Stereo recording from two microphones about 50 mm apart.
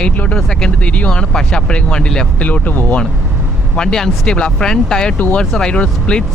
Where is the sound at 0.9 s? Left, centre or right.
Left.